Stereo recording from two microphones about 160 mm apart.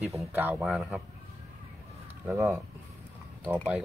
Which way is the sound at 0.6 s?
Centre (ahead or behind).